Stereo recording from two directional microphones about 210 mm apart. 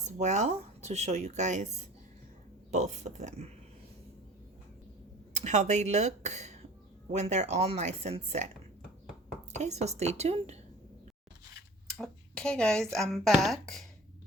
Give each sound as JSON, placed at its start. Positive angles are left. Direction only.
{"t": 0.0, "sound": "speech", "side_deg": -35}
{"t": 5.3, "sound": "speech", "side_deg": -35}
{"t": 9.6, "sound": "speech", "side_deg": -30}
{"t": 11.9, "sound": "speech", "side_deg": 5}